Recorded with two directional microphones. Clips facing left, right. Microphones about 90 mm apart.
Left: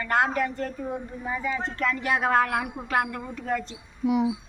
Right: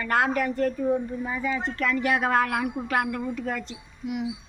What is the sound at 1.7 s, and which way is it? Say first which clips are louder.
A woman's voice: right 2 dB; 30° left (ahead or behind).